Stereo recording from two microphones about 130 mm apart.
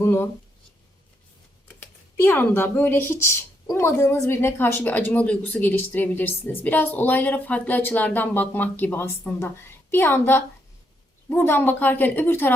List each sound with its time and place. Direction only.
0.0 s speech: 15° left (ahead or behind)
2.2 s a woman's voice: 15° left (ahead or behind)